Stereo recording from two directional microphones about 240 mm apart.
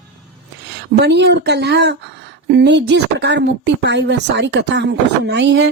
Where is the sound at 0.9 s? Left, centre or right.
Right.